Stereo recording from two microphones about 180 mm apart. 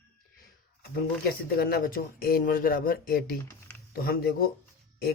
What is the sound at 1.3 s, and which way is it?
Speech, 60° left (ahead or behind).